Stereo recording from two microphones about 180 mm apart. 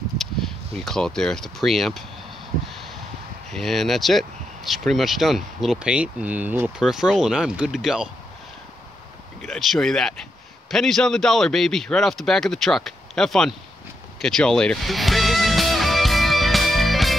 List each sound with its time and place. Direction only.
0.7 s speech: centre (ahead or behind)
3.5 s speech: centre (ahead or behind)
9.4 s speech: centre (ahead or behind)
14.2 s music: 5° left (ahead or behind)